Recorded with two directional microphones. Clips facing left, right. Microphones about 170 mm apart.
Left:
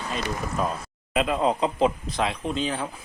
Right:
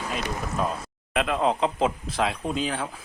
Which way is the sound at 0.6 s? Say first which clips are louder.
Even; centre (ahead or behind).